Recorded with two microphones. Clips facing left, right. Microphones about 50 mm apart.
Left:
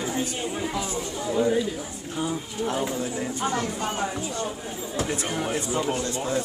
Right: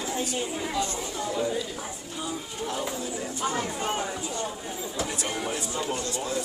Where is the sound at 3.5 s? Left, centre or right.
Centre.